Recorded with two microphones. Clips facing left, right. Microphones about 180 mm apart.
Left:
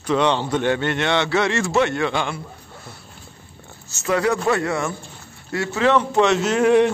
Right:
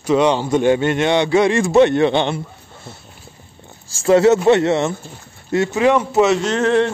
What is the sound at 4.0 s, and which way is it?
A man's voice, 25° right (ahead or behind).